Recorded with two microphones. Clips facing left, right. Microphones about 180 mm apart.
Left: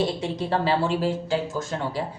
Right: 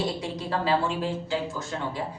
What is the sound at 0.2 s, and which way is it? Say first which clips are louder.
Speech: left 4 dB; 30° left (ahead or behind).